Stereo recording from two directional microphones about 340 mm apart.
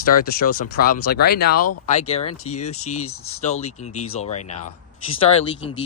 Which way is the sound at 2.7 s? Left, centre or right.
Left.